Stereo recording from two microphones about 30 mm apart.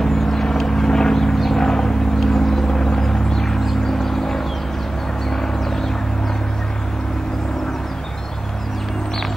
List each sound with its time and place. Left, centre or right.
0.0 s vehicle: centre
1.3 s vehicle: centre
1.6 s vehicle: centre